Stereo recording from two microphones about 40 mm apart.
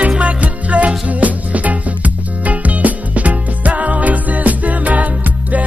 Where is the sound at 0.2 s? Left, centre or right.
Right.